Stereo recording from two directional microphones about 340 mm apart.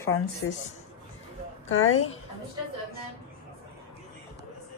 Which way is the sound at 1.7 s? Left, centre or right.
Left.